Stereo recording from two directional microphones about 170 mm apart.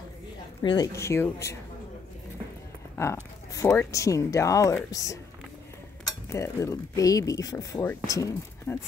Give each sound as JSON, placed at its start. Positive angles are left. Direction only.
{"t": 0.6, "sound": "speech", "side_deg": 20}
{"t": 3.0, "sound": "speech", "side_deg": 15}
{"t": 6.3, "sound": "speech", "side_deg": 15}